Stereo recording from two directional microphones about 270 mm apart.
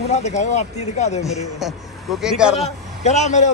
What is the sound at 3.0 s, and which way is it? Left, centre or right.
Speech, left.